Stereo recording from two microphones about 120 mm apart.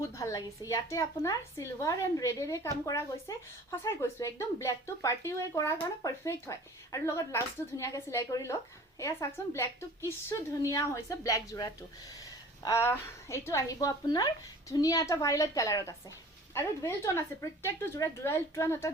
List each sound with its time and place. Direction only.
0.1 s a woman's voice: 25° left (ahead or behind)